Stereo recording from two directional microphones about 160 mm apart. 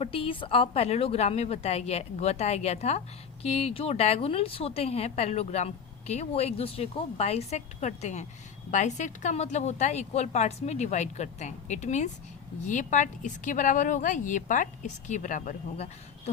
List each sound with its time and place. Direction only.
0.0 s a woman's voice: 35° left (ahead or behind)